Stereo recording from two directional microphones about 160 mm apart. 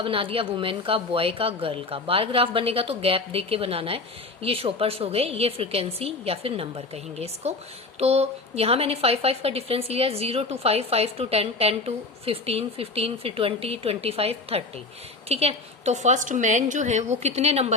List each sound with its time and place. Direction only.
0.0 s a woman's voice: 35° right (ahead or behind)